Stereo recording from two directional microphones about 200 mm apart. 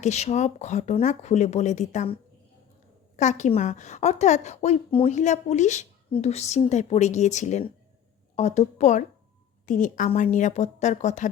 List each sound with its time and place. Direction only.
0.0 s a woman's voice: 35° left (ahead or behind)
3.2 s a woman's voice: 35° left (ahead or behind)